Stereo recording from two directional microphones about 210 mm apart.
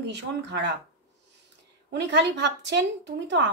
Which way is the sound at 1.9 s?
55° right (ahead or behind).